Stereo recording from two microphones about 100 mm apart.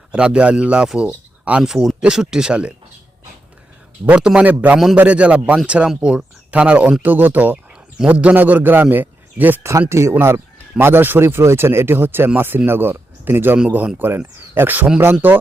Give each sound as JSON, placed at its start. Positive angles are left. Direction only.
{"t": 0.1, "sound": "speech", "side_deg": -10}
{"t": 4.0, "sound": "speech", "side_deg": -10}